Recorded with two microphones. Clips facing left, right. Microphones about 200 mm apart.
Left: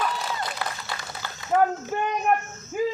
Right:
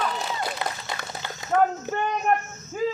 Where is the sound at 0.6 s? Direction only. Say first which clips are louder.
Right 2 dB; 20° right (ahead or behind).